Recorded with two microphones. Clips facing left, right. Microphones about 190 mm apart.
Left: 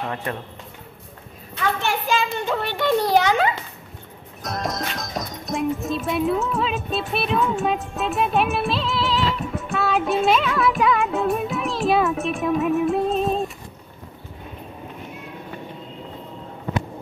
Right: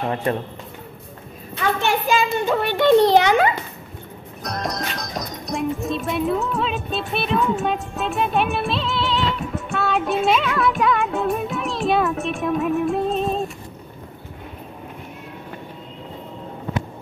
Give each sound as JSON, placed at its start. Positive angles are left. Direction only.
{"t": 0.0, "sound": "speech", "side_deg": -30}
{"t": 1.5, "sound": "a sound", "side_deg": -15}
{"t": 2.8, "sound": "a child's voice", "side_deg": -20}
{"t": 4.4, "sound": "speech", "side_deg": 0}